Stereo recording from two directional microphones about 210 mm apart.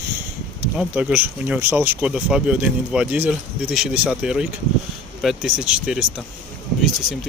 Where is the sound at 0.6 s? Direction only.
5° right (ahead or behind).